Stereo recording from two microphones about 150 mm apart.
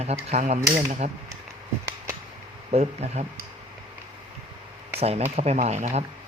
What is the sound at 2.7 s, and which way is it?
Speech, 45° right (ahead or behind).